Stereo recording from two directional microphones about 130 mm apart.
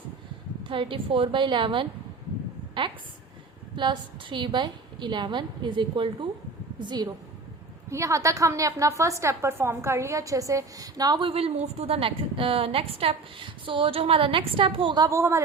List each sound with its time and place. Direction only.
0.6 s a woman's voice: 40° right (ahead or behind)
7.9 s a woman's voice: 25° right (ahead or behind)